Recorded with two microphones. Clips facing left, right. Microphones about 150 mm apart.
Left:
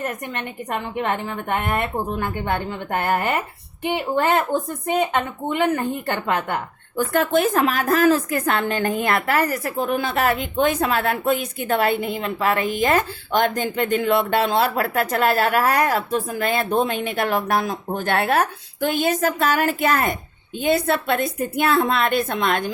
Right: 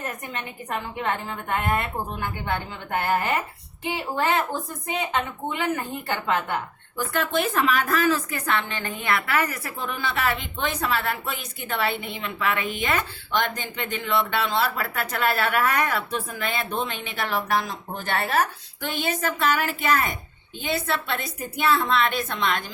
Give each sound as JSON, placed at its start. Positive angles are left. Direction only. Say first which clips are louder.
{"t": 0.9, "sound": "a woman's voice", "louder": "left 5 dB", "side_deg": 60}
{"t": 5.5, "sound": "a woman's voice", "louder": "left 9 dB", "side_deg": 50}